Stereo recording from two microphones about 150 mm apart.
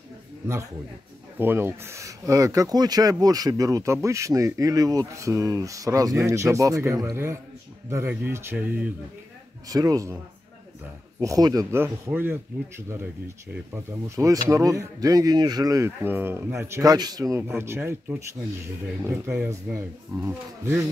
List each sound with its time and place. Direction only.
1.4 s speech: 15° right (ahead or behind)
9.7 s speech: 25° right (ahead or behind)
11.1 s speech: 20° right (ahead or behind)